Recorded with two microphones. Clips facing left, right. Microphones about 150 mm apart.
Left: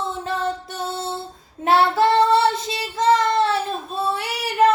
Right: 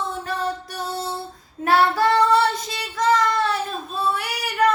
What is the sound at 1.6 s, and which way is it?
Child singing, 25° left (ahead or behind).